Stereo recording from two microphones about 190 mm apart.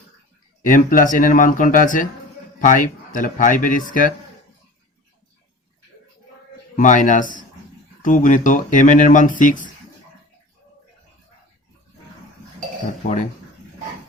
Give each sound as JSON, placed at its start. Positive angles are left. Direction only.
{"t": 0.6, "sound": "speech", "side_deg": 45}
{"t": 6.7, "sound": "speech", "side_deg": 40}